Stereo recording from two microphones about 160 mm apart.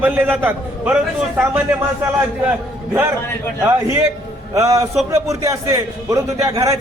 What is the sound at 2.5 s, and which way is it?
A man's voice, 15° right (ahead or behind).